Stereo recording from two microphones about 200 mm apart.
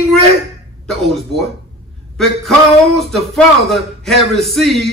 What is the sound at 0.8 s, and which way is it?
Speech, centre (ahead or behind).